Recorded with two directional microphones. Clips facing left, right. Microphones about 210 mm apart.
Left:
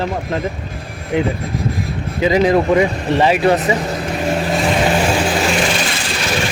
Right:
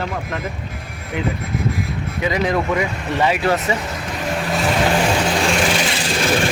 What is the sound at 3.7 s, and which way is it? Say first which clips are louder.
Speech: left 4 dB; 35° left (ahead or behind).